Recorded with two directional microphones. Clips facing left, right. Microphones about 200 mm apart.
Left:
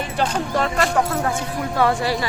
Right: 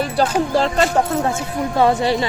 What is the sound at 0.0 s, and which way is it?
Music, 35° right (ahead or behind).